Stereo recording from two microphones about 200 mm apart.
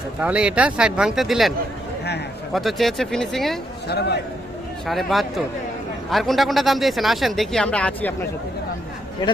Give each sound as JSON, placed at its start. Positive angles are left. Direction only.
{"t": 0.2, "sound": "a man's voice", "side_deg": -5}
{"t": 3.8, "sound": "speech", "side_deg": 55}
{"t": 4.9, "sound": "a man's voice", "side_deg": 0}